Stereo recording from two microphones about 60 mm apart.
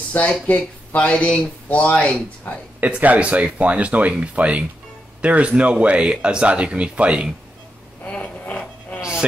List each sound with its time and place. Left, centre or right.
0.1 s speech: left
2.8 s speech: right
8.0 s a sound: left